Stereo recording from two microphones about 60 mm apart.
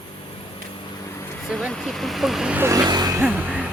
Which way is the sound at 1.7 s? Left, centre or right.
Centre.